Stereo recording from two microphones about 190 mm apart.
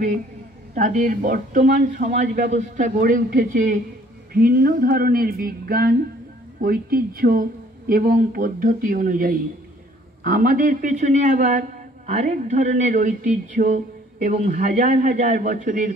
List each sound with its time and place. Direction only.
0.7 s speech: 40° right (ahead or behind)